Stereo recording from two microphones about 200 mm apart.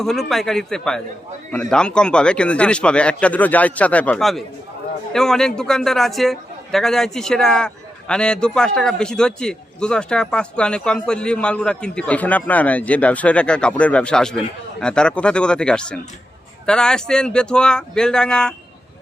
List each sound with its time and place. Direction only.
0.0 s a man's voice: centre (ahead or behind)